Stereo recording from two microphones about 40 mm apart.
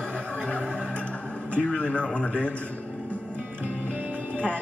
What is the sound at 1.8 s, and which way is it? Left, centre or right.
Speech, left.